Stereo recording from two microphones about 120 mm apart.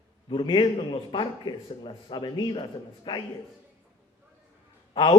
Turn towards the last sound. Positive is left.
turn(degrees=45)  # may be behind; listen again after turning